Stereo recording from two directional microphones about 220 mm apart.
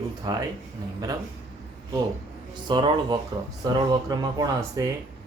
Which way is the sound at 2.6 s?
20° right (ahead or behind).